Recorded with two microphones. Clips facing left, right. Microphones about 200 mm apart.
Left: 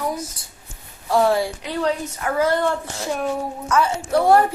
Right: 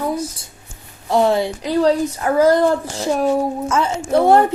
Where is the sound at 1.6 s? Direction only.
35° right (ahead or behind).